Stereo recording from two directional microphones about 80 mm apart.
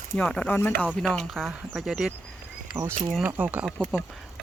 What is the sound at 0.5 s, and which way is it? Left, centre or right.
Speech, left.